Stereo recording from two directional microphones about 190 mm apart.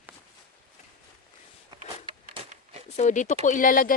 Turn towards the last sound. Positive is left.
turn(degrees=45)  # may be behind; listen again after turning